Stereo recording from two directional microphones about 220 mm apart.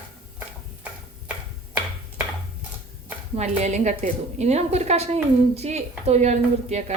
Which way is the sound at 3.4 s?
30° right (ahead or behind).